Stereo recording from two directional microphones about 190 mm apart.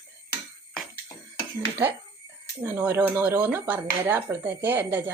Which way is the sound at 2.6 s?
10° right (ahead or behind).